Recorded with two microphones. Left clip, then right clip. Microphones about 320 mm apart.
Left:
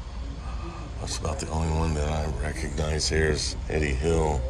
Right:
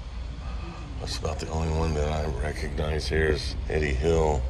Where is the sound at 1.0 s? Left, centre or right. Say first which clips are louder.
Even; centre.